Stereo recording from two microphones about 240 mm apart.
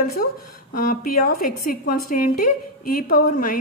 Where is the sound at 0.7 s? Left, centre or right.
Left.